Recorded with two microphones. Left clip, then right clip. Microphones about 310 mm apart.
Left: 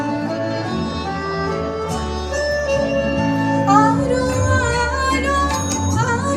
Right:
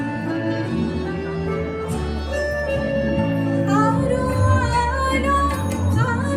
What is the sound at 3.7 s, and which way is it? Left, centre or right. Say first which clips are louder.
Music: left 6 dB; centre.